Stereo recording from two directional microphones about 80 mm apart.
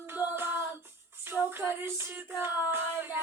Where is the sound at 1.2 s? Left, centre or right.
Right.